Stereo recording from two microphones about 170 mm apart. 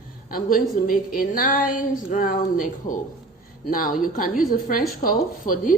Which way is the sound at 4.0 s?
55° left (ahead or behind).